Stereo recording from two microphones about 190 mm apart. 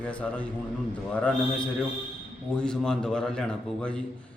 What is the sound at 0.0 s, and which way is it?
Speech, 5° left (ahead or behind).